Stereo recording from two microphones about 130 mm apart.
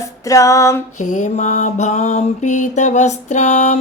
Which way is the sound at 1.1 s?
70° left (ahead or behind).